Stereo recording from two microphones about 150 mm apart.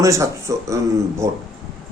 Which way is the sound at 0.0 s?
20° right (ahead or behind).